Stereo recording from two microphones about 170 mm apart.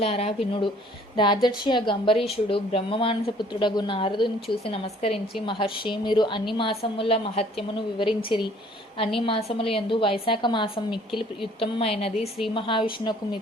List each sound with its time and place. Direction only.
0.0 s a woman's voice: 35° left (ahead or behind)